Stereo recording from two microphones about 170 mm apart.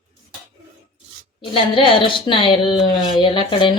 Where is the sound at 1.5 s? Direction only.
30° left (ahead or behind).